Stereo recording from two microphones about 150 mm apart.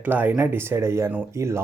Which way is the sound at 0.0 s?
10° right (ahead or behind).